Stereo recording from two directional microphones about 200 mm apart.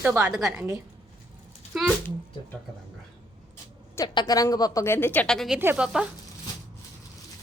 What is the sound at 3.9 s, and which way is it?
A woman's voice, 20° left (ahead or behind).